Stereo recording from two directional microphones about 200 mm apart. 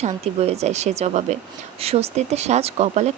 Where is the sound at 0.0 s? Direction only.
30° right (ahead or behind).